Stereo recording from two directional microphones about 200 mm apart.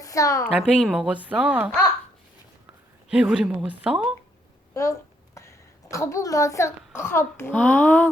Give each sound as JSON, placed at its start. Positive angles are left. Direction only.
{"t": 0.0, "sound": "a woman's voice", "side_deg": 15}
{"t": 0.4, "sound": "a woman's voice", "side_deg": 0}
{"t": 3.1, "sound": "a woman's voice", "side_deg": -5}
{"t": 4.7, "sound": "a woman's voice", "side_deg": 15}